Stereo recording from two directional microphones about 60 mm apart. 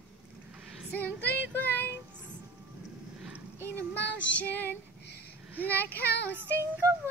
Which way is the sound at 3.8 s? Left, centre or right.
Left.